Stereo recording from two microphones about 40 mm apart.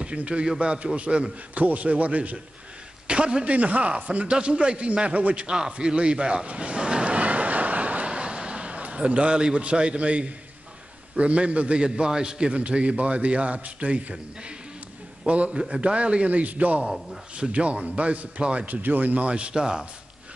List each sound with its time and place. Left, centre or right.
0.0 s a man's voice: right
1.5 s a man's voice: right
3.1 s a man's voice: right
3.5 s a man's voice: right
15.2 s a man's voice: right
18.7 s speech: right
19.2 s a man's voice: right
19.6 s speech: centre